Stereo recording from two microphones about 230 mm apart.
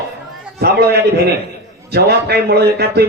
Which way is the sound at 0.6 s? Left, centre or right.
Right.